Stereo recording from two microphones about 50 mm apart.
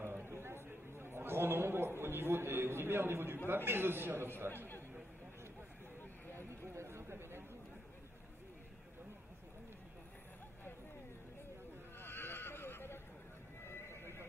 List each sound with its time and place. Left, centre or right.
0.2 s chatter: right
3.4 s a man's voice: right
6.3 s a sound: right
12.0 s neigh: left